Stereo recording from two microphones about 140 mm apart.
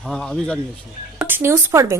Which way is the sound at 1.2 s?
15° right (ahead or behind).